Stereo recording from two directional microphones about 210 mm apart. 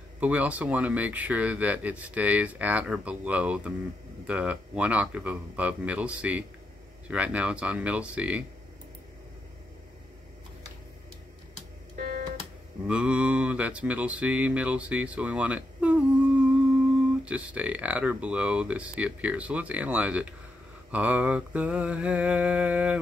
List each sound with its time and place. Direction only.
0.2 s speech: 5° right (ahead or behind)
11.9 s music: 45° right (ahead or behind)
12.8 s mantra: 5° right (ahead or behind)
17.2 s speech: 5° right (ahead or behind)